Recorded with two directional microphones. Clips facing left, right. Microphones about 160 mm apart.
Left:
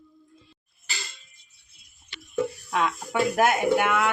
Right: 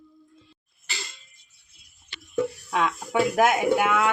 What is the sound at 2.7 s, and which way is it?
Speech, 15° right (ahead or behind).